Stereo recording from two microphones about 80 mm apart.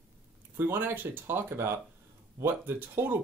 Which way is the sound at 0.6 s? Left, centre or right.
Right.